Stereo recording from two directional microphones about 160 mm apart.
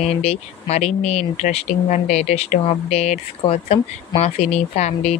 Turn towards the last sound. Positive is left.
turn(degrees=40)  # may be behind; listen again after turning